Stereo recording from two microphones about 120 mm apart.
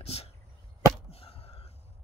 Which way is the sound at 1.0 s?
55° left (ahead or behind).